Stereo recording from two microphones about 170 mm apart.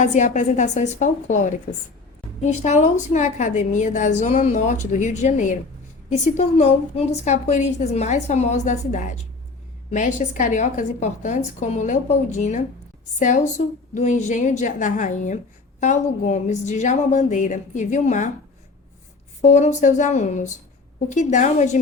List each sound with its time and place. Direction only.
0.0 s a woman's voice: 45° left (ahead or behind)
19.4 s a woman's voice: 45° left (ahead or behind)